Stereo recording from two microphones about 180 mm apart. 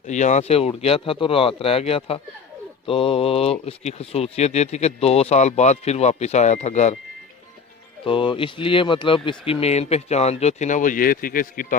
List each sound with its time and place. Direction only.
0.1 s speech: 40° left (ahead or behind)
8.0 s speech: 30° left (ahead or behind); by 11.8 s 50° left (ahead or behind)